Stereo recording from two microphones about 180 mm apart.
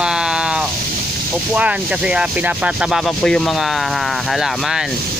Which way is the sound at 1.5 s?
5° right (ahead or behind).